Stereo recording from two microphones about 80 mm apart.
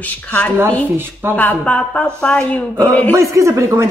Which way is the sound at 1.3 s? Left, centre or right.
Centre.